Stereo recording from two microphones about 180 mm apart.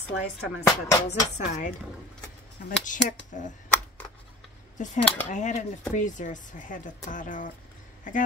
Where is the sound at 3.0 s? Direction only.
45° left (ahead or behind).